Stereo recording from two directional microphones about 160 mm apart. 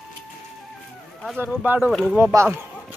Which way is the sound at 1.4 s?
10° right (ahead or behind).